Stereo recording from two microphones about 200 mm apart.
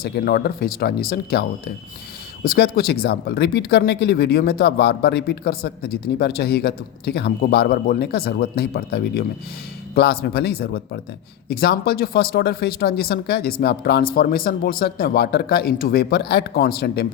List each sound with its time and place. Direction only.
0.0 s speech: 45° left (ahead or behind)